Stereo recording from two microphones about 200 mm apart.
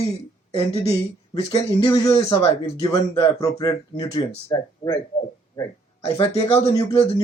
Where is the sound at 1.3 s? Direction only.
20° left (ahead or behind).